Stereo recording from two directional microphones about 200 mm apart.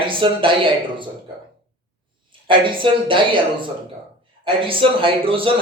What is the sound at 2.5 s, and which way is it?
Speech, 25° right (ahead or behind).